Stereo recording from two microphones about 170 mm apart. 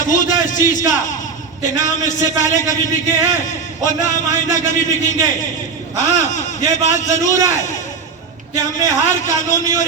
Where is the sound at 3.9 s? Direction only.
45° left (ahead or behind).